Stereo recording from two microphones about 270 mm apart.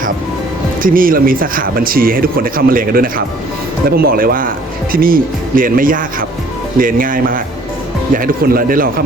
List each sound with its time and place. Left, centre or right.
0.8 s speech: right